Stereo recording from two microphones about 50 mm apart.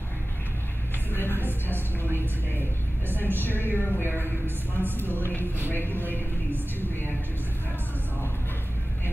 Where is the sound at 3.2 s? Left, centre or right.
Left.